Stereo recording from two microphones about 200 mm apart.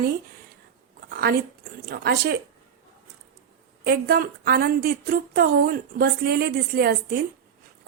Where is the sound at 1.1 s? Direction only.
50° right (ahead or behind).